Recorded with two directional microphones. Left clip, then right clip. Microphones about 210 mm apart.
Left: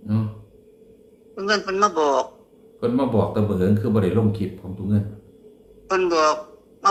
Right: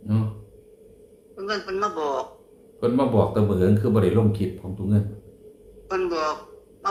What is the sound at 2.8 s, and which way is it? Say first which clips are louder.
Speech: even; centre (ahead or behind).